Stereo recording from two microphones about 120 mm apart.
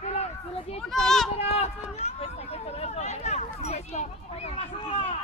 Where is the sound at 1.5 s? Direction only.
60° left (ahead or behind).